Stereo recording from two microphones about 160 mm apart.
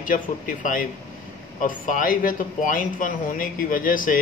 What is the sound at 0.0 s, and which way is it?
Speech, 55° left (ahead or behind).